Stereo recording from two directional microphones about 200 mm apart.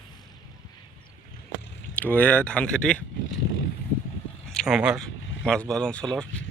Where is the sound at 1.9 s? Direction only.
10° left (ahead or behind).